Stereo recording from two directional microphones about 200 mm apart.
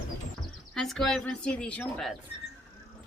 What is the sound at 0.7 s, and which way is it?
Speech, centre (ahead or behind).